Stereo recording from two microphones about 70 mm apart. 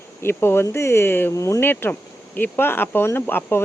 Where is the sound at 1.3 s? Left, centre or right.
Left.